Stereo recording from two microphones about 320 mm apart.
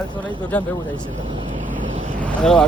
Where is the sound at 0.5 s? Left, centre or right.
Centre.